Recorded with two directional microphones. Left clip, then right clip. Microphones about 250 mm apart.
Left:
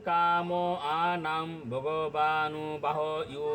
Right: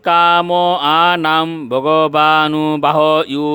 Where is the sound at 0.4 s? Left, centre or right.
Right.